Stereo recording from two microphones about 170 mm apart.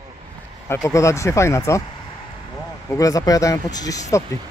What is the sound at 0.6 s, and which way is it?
Speech, 15° left (ahead or behind).